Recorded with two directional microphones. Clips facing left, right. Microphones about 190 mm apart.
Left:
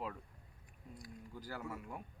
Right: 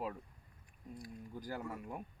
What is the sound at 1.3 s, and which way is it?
Speech, 15° right (ahead or behind).